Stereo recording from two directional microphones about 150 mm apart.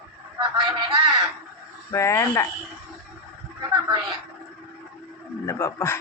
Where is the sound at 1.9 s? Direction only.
20° left (ahead or behind).